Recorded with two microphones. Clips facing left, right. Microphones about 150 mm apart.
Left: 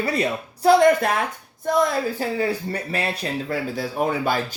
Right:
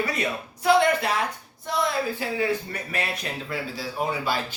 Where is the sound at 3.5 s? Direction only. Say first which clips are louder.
Left 6 dB; 50° left (ahead or behind).